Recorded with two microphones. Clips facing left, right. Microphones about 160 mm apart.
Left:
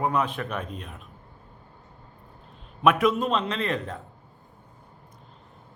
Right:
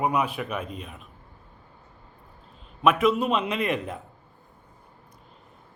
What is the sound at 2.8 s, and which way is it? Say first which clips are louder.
A man's voice: even; centre (ahead or behind).